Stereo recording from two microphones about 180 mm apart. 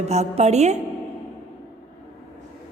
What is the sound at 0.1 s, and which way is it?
Speech, 35° right (ahead or behind).